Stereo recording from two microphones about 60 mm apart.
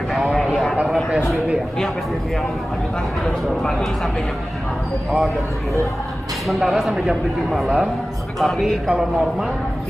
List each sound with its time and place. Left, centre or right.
0.1 s vehicle: centre
3.3 s speech: centre
6.4 s speech: centre